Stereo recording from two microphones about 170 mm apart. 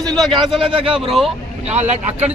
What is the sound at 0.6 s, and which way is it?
A man's voice, 30° right (ahead or behind).